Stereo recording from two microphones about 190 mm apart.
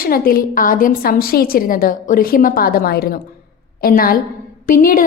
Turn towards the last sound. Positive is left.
turn(degrees=45)  # may be behind; listen again after turning